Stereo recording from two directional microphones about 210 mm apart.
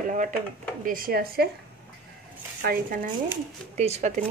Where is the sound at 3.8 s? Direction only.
30° right (ahead or behind).